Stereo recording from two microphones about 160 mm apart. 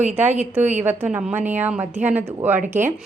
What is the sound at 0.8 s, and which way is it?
A woman's voice, 10° right (ahead or behind).